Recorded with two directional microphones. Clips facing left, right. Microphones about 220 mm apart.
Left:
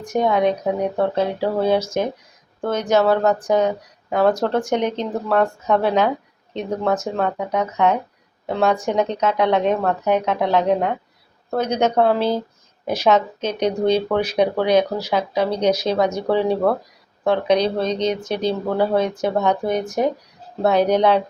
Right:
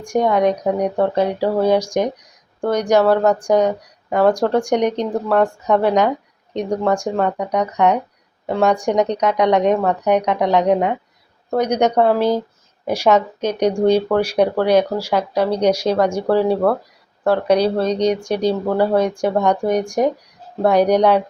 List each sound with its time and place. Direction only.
0.0 s speech: 10° right (ahead or behind)
5.1 s speech: centre (ahead or behind)
5.7 s speech: 15° right (ahead or behind)
7.3 s speech: 5° left (ahead or behind)
8.4 s speech: 10° right (ahead or behind)